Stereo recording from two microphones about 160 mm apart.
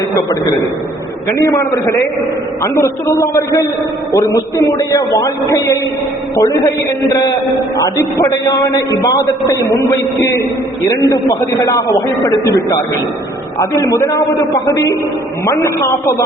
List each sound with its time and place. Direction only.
1.3 s a man's voice: 20° left (ahead or behind)
7.9 s a man's voice: 20° left (ahead or behind)
13.6 s a man's voice: 20° left (ahead or behind)